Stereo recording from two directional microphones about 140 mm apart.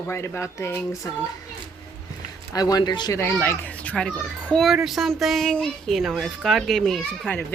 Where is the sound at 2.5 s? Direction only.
25° left (ahead or behind).